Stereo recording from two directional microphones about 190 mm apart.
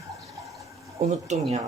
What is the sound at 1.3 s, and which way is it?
Speech, 40° right (ahead or behind).